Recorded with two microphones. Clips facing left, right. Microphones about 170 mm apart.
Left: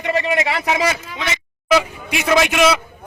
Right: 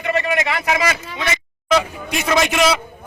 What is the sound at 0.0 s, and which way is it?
Speech, 25° left (ahead or behind).